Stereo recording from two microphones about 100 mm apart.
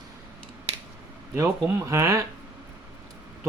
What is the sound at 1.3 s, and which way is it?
Speech, 30° right (ahead or behind).